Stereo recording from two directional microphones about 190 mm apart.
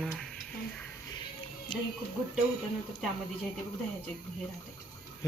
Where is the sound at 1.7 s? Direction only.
25° left (ahead or behind).